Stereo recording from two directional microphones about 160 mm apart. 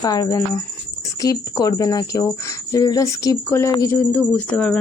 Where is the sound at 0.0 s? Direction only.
25° left (ahead or behind).